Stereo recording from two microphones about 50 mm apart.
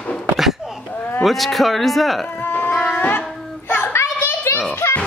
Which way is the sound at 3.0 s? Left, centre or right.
Left.